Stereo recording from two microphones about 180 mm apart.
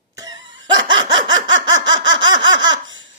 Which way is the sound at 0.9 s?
25° right (ahead or behind).